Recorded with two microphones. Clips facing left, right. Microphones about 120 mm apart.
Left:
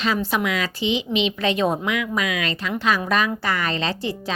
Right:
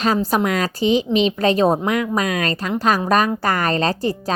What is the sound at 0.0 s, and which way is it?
Speech, 40° right (ahead or behind).